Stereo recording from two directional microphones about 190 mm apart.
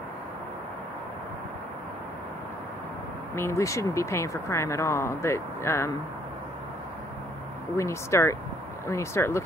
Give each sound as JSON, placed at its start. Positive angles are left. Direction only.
{"t": 3.3, "sound": "speech", "side_deg": 15}
{"t": 7.7, "sound": "speech", "side_deg": 15}